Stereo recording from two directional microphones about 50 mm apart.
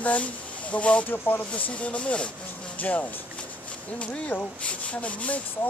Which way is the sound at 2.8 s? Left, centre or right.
Left.